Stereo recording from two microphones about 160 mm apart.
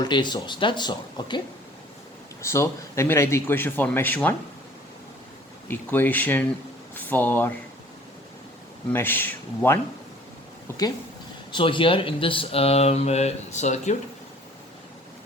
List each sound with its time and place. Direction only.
0.0 s speech: 30° left (ahead or behind)
2.4 s speech: 15° left (ahead or behind)
5.6 s speech: 10° left (ahead or behind)
8.9 s speech: 15° left (ahead or behind)
11.5 s speech: 30° left (ahead or behind)